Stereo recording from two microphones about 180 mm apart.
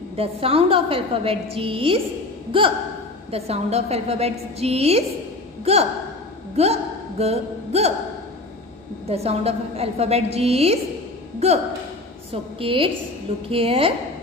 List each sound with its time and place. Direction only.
0.1 s a woman's voice: 30° right (ahead or behind)
6.5 s a sound: 35° right (ahead or behind)
9.0 s a woman's voice: 35° right (ahead or behind)